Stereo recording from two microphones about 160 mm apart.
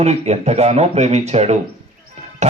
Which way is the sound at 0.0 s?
45° right (ahead or behind).